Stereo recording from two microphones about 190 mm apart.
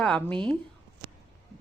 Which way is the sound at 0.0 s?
5° left (ahead or behind).